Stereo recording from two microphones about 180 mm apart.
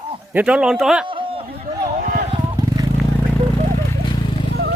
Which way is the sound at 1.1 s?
30° right (ahead or behind).